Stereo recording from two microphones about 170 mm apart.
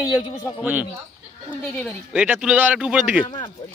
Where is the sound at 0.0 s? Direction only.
20° left (ahead or behind).